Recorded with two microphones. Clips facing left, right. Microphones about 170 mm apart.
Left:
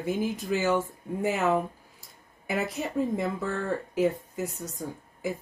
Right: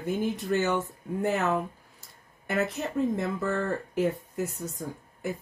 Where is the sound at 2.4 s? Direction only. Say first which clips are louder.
Right 1 dB; centre (ahead or behind).